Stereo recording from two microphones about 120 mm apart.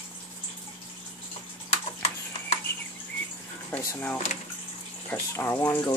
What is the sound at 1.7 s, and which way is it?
Horse, 65° left (ahead or behind).